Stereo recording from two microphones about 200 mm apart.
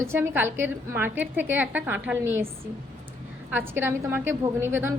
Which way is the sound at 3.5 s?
10° right (ahead or behind).